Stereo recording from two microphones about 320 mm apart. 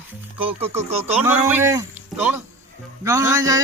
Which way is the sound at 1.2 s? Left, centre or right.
Centre.